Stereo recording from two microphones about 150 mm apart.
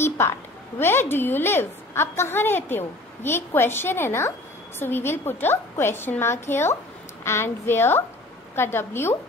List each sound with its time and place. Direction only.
0.7 s a woman's voice: 15° left (ahead or behind)